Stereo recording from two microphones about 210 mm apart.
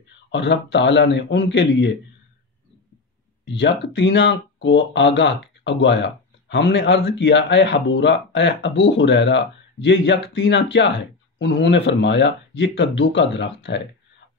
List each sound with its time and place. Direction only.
0.3 s speech: 55° left (ahead or behind)
3.4 s speech: 55° left (ahead or behind)